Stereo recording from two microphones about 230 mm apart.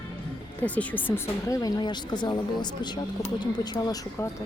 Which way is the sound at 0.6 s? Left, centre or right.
Centre.